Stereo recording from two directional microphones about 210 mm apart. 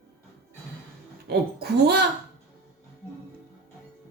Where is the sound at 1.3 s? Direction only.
50° right (ahead or behind).